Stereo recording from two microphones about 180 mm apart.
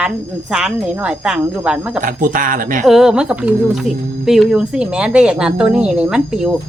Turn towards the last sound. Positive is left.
turn(degrees=-5)  # may be behind; listen again after turning